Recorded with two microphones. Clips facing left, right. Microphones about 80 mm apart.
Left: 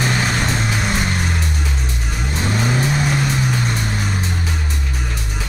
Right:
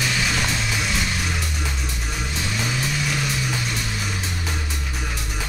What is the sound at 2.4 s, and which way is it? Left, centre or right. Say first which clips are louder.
Vehicle: left 8 dB; left.